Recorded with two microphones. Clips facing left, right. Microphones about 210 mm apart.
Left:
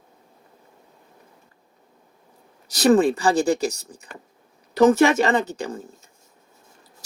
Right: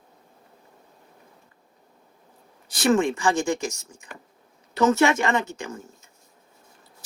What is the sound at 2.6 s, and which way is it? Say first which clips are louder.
Speech: left 4 dB; 40° left (ahead or behind).